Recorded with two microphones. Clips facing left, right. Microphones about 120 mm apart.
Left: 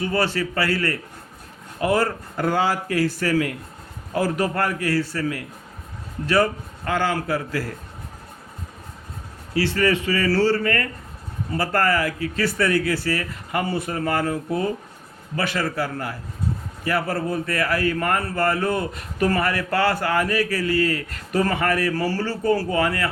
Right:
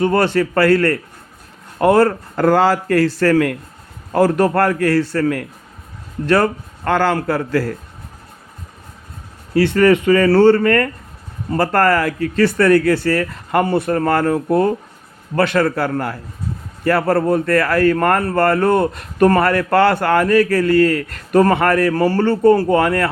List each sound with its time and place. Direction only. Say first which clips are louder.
0.0 s a man's voice: right 8 dB; 60° right (ahead or behind)
9.7 s speech: right 10 dB; 55° right (ahead or behind)
11.5 s a man's voice: right 6 dB; 65° right (ahead or behind)